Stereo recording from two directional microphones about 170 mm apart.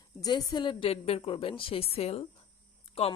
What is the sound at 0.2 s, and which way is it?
A woman's voice, 25° left (ahead or behind).